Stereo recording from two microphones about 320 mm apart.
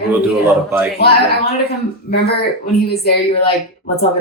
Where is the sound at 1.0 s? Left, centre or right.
Left.